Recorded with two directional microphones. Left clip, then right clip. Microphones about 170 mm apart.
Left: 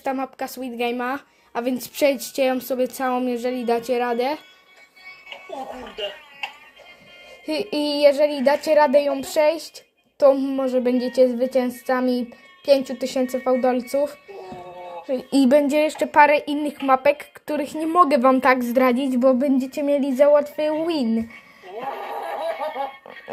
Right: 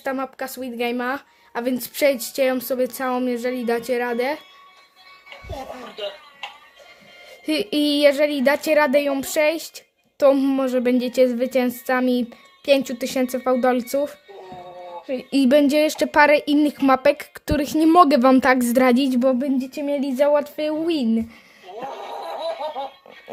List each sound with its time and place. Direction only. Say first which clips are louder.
0.0 s speech: even; 5° right (ahead or behind)
5.5 s speech: even; 20° left (ahead or behind)
7.4 s a woman's voice: right 2 dB; 20° right (ahead or behind)
10.3 s a woman's voice: right 1 dB; 30° right (ahead or behind)
15.0 s speech: left 1 dB; 5° right (ahead or behind)
15.5 s a woman's voice: right 2 dB; 15° right (ahead or behind)
19.1 s speech: left 2 dB; 10° right (ahead or behind)
19.8 s speech: left 3 dB; 15° right (ahead or behind)
21.7 s a sound: left 2 dB; 25° left (ahead or behind)